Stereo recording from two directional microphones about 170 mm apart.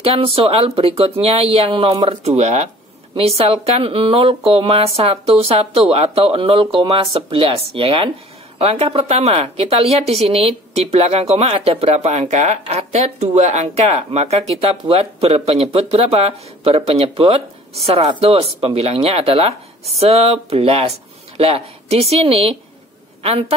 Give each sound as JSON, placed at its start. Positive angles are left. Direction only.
{"t": 0.0, "sound": "a woman's voice", "side_deg": -35}